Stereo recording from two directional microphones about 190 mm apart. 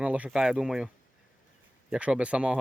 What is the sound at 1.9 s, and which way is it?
Speech, 5° right (ahead or behind).